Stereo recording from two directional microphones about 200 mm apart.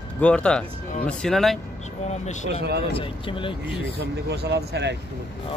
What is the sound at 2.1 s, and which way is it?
Speech, 35° left (ahead or behind).